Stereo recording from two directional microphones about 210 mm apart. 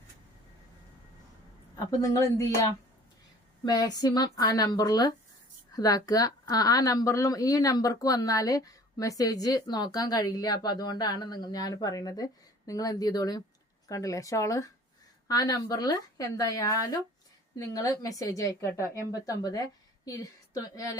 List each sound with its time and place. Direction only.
2.0 s a woman's voice: 15° left (ahead or behind)
3.7 s a woman's voice: 20° left (ahead or behind)